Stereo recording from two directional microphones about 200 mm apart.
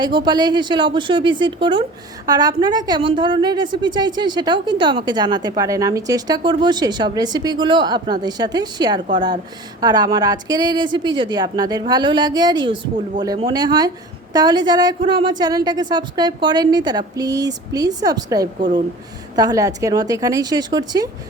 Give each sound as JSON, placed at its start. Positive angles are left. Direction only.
{"t": 0.0, "sound": "a woman's voice", "side_deg": -20}